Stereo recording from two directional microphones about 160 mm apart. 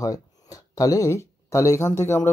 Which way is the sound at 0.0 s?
20° left (ahead or behind).